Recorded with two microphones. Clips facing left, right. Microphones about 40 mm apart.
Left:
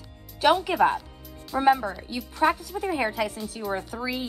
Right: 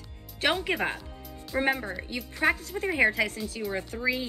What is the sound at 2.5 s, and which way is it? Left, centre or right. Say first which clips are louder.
Speech: left 2 dB; right.